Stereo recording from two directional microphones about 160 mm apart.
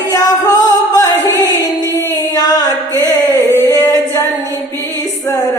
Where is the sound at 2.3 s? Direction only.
25° left (ahead or behind).